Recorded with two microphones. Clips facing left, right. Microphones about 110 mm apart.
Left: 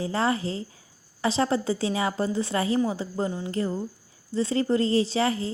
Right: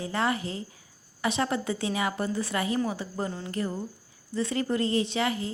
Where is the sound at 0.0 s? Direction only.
30° left (ahead or behind).